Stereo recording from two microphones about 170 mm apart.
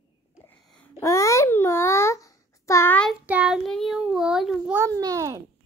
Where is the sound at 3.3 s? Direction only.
5° right (ahead or behind).